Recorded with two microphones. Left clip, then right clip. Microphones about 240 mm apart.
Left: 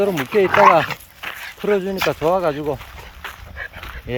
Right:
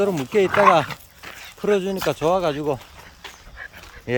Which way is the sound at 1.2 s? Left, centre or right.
Centre.